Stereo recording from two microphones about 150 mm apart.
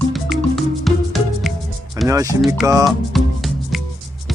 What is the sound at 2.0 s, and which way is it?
Music, 20° right (ahead or behind).